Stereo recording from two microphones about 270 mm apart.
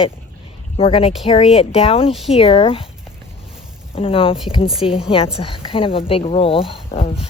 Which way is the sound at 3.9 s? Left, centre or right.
Centre.